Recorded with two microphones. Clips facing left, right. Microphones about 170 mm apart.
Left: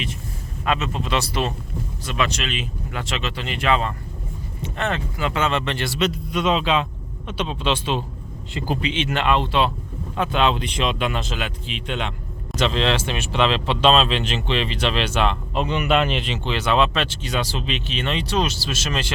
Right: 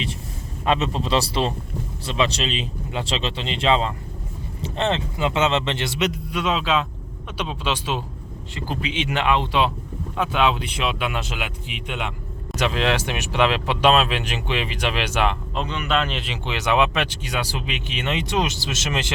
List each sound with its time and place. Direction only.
0.6 s speech: 30° right (ahead or behind); by 15.4 s 10° right (ahead or behind)
15.5 s a man's voice: 10° left (ahead or behind)
16.2 s speech: 10° right (ahead or behind)